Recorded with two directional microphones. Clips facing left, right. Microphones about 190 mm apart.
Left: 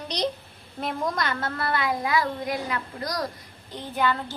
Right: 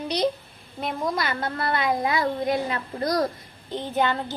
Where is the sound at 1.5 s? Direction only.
20° right (ahead or behind).